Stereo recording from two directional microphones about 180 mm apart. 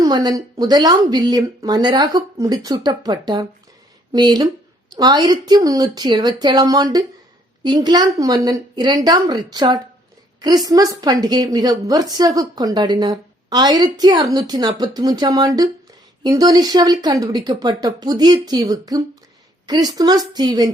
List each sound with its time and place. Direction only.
0.0 s a woman's voice: 25° right (ahead or behind)